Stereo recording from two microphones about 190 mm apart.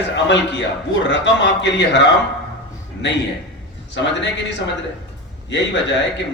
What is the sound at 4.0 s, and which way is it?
Speech, 70° left (ahead or behind).